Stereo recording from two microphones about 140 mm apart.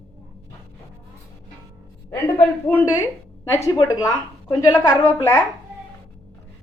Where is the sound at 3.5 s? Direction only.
20° left (ahead or behind).